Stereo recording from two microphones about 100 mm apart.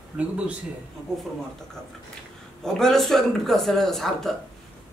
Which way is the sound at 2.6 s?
5° left (ahead or behind).